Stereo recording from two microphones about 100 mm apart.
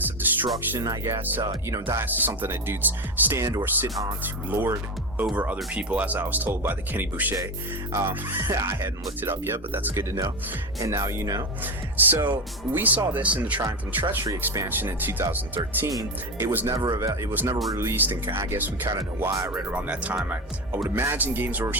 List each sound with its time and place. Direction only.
0.0 s music: 20° right (ahead or behind)
0.8 s speech: 35° right (ahead or behind)
2.0 s speech: 20° right (ahead or behind)
11.6 s speech: 20° right (ahead or behind)
13.6 s speech: 40° right (ahead or behind)
14.7 s speech: 20° right (ahead or behind)
16.7 s speech: 40° right (ahead or behind)
17.3 s speech: 25° right (ahead or behind)
19.2 s speech: 25° right (ahead or behind)
19.5 s speech: 15° right (ahead or behind)